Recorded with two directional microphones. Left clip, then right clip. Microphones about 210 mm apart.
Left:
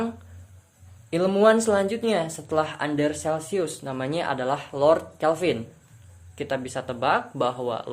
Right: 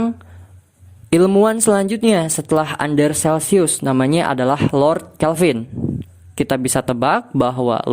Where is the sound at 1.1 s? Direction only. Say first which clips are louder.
Right 5 dB; 50° right (ahead or behind).